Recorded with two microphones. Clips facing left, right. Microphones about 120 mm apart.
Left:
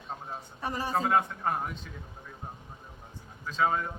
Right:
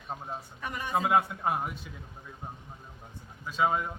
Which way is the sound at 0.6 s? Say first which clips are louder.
Left 5 dB; 30° left (ahead or behind).